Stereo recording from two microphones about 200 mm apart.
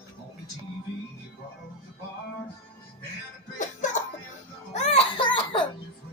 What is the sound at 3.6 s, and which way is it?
Music, 40° left (ahead or behind).